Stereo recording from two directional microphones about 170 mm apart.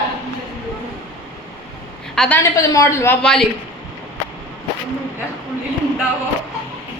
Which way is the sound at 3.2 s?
5° left (ahead or behind).